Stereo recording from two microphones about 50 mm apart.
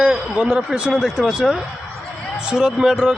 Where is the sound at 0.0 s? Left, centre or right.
Right.